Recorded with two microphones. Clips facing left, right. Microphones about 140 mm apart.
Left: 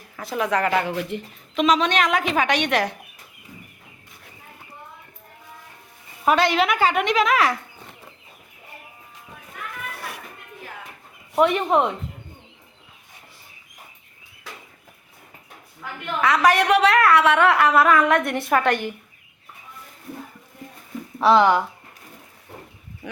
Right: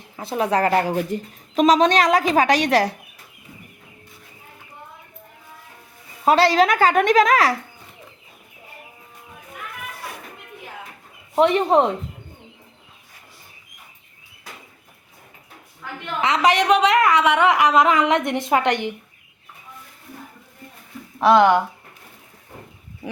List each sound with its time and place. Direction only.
0.2 s speech: 30° right (ahead or behind)
6.2 s speech: 35° right (ahead or behind)
11.3 s speech: 30° right (ahead or behind)
16.2 s a woman's voice: 20° right (ahead or behind)